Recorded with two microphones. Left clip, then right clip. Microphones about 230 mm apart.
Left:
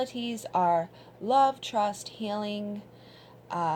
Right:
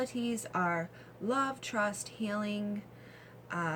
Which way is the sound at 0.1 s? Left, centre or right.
Centre.